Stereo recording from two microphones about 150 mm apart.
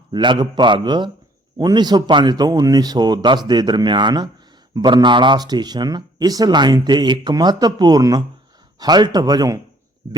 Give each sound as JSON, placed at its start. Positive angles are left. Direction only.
{"t": 0.1, "sound": "a man's voice", "side_deg": -30}